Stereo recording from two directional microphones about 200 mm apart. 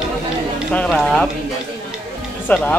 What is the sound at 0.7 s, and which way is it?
Speech, 5° left (ahead or behind).